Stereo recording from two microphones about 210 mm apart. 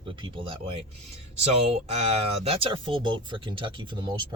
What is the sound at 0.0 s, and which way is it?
Speech, 25° right (ahead or behind).